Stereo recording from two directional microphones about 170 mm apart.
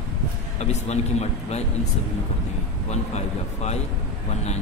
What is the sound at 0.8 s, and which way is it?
Speech, 40° left (ahead or behind).